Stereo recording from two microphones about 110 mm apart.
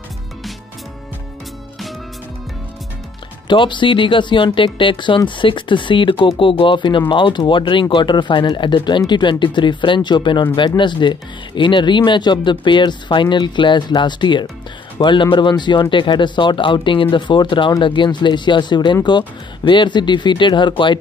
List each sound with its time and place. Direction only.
3.4 s speech: 45° left (ahead or behind)